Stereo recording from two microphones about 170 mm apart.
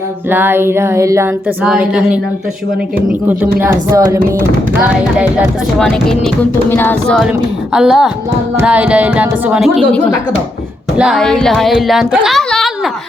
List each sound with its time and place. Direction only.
0.3 s speech: 10° right (ahead or behind)
1.6 s speech: 5° right (ahead or behind)
6.7 s music: 10° left (ahead or behind)
7.2 s speech: 5° right (ahead or behind)